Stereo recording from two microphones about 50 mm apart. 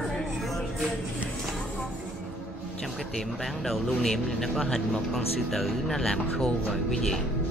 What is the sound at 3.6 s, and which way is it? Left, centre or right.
Speech, centre.